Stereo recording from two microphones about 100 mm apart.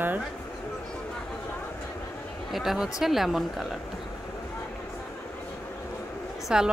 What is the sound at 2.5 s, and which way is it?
Speech, centre (ahead or behind).